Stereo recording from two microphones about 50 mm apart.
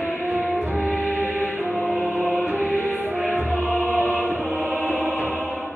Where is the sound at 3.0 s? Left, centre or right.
Right.